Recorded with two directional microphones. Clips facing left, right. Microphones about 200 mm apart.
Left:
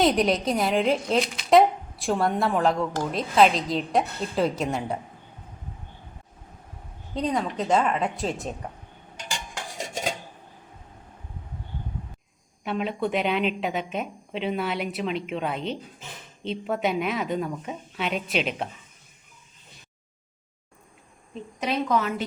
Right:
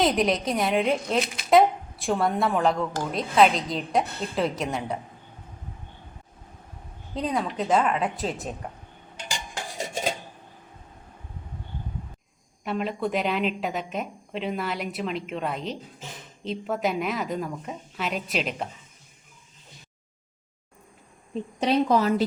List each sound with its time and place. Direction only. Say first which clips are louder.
0.0 s speech: left 1 dB; centre (ahead or behind)
7.1 s speech: left 1 dB; centre (ahead or behind)
12.6 s speech: left 1 dB; centre (ahead or behind)
21.6 s speech: right 4 dB; 35° right (ahead or behind)